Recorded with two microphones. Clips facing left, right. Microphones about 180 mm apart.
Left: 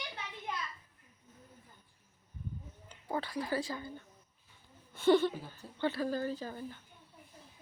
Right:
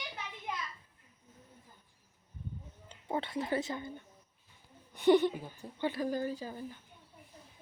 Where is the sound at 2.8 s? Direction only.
25° right (ahead or behind).